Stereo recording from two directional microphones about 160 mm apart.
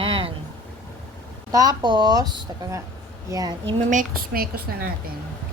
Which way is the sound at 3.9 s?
60° right (ahead or behind).